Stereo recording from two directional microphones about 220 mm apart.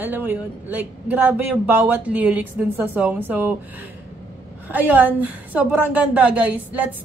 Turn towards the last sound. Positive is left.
turn(degrees=-5)  # may be behind; listen again after turning